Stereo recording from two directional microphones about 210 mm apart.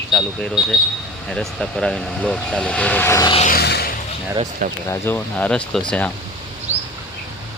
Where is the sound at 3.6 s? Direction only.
50° left (ahead or behind).